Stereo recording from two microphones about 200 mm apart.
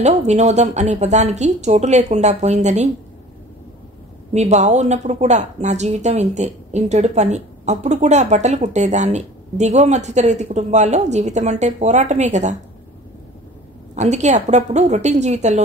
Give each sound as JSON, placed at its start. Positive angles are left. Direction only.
{"t": 0.0, "sound": "speech", "side_deg": -35}
{"t": 4.3, "sound": "speech", "side_deg": -35}
{"t": 13.9, "sound": "speech", "side_deg": -35}